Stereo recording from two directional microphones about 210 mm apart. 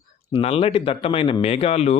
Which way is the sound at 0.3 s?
30° left (ahead or behind).